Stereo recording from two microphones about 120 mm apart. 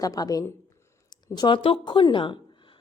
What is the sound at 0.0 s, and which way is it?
A woman's voice, 30° left (ahead or behind).